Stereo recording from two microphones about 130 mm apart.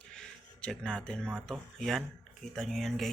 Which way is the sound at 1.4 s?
5° left (ahead or behind).